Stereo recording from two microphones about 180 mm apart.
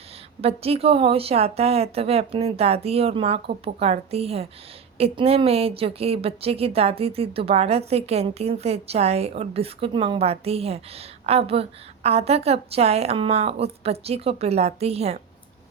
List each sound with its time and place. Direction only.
0.4 s a woman's voice: 35° right (ahead or behind)